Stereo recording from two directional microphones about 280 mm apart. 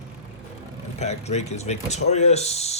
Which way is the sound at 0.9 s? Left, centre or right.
Left.